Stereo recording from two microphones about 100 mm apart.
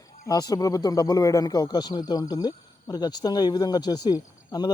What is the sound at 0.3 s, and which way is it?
Speech, 40° left (ahead or behind).